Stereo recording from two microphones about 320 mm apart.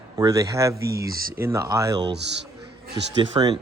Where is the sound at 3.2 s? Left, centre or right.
Centre.